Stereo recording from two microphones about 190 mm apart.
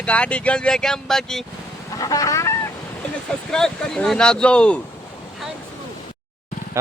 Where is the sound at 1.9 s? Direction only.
20° left (ahead or behind).